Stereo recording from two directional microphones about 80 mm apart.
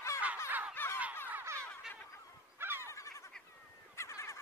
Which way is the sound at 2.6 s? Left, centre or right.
Right.